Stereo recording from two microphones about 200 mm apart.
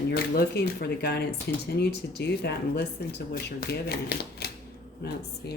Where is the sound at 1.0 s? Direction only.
55° left (ahead or behind).